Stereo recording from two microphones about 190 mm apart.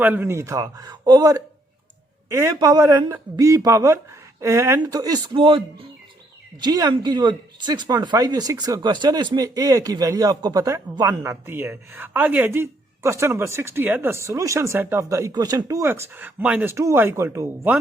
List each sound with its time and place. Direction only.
0.0 s speech: 10° right (ahead or behind)